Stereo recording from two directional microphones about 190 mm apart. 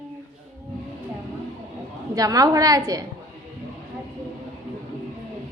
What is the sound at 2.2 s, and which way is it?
Speech, 20° right (ahead or behind).